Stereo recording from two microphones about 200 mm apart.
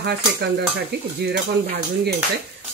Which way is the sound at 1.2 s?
55° right (ahead or behind).